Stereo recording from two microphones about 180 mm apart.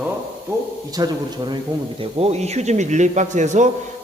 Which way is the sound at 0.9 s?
20° right (ahead or behind).